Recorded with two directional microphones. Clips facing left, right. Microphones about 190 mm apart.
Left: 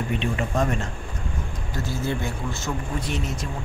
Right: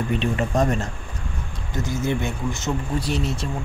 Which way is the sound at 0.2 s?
35° right (ahead or behind).